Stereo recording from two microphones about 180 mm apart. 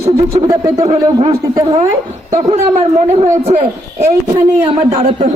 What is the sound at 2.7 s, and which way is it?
A man's voice, 40° right (ahead or behind).